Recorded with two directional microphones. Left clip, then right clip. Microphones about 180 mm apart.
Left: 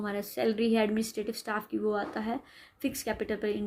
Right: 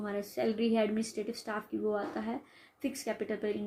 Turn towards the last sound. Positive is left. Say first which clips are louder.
# left 3 dB
turn(degrees=50)  # may be behind; listen again after turning